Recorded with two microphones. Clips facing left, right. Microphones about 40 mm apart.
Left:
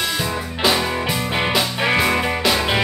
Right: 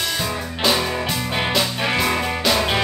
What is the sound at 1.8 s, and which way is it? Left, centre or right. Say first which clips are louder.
Music: left 3 dB; centre.